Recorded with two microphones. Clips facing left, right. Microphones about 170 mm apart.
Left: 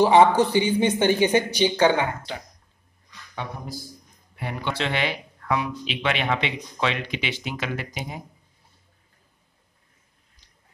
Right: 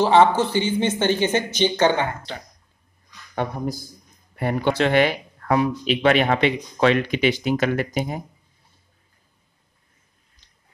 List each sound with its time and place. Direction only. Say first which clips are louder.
0.0 s speech: even; 15° left (ahead or behind)
4.4 s speech: right 8 dB; 45° right (ahead or behind)